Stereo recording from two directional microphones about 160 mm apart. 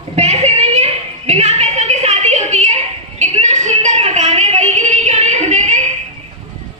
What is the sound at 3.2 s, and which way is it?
Music, 45° right (ahead or behind).